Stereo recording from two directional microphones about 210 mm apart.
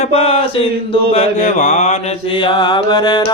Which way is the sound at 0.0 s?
30° left (ahead or behind).